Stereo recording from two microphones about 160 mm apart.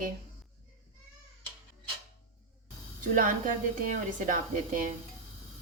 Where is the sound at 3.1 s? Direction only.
60° right (ahead or behind).